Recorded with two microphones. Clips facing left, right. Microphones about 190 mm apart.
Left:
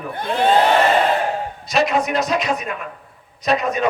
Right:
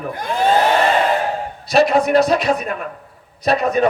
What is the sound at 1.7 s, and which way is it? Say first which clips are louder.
A man's voice: right 5 dB; 35° right (ahead or behind).